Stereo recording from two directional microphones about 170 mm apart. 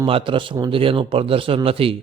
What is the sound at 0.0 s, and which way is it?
A man's voice, 30° right (ahead or behind).